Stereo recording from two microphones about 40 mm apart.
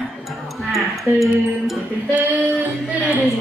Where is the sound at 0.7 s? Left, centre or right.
Centre.